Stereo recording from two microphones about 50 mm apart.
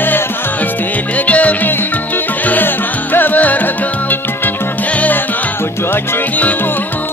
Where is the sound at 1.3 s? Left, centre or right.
Left.